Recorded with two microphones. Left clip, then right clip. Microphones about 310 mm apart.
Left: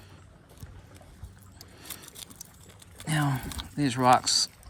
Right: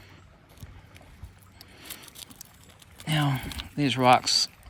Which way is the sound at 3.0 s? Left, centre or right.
Centre.